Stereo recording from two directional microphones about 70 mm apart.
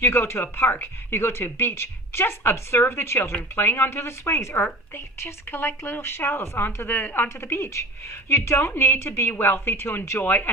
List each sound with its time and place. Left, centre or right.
0.0 s a woman's voice: left